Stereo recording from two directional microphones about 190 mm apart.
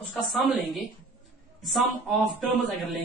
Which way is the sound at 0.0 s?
Centre (ahead or behind).